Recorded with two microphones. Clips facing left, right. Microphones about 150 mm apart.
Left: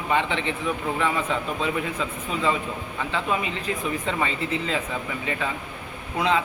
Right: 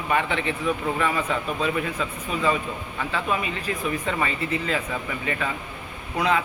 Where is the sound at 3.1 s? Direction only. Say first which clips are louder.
Even; 20° left (ahead or behind).